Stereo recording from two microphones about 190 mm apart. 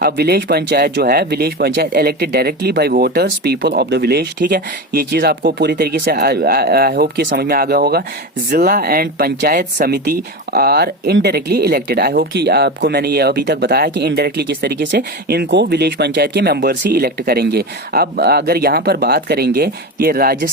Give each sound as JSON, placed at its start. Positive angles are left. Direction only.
{"t": 0.0, "sound": "speech", "side_deg": -60}